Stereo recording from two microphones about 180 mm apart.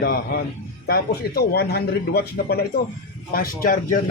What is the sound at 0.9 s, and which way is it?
A man's voice, 60° left (ahead or behind).